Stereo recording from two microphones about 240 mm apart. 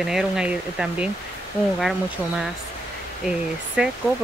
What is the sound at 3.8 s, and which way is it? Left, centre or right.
Speech, centre.